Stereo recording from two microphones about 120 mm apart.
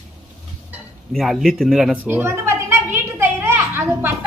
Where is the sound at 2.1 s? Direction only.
20° right (ahead or behind).